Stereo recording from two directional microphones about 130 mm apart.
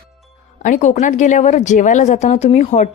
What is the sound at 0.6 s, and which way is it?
Speech, 75° left (ahead or behind).